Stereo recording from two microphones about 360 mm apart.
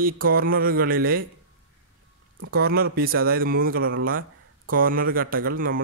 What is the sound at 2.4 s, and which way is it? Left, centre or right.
Speech, right.